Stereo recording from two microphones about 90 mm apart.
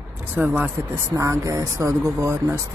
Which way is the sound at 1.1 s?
35° right (ahead or behind).